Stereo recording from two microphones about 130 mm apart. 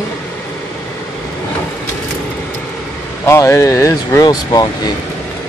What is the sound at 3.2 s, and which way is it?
Speech, 20° left (ahead or behind).